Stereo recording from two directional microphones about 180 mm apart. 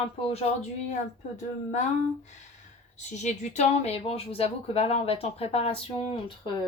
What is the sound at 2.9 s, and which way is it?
Speech, 40° left (ahead or behind).